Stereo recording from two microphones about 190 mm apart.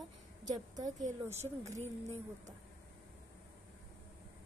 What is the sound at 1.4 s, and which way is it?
Speech, 35° right (ahead or behind).